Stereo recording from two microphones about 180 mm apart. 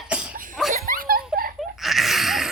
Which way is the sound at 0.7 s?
50° right (ahead or behind).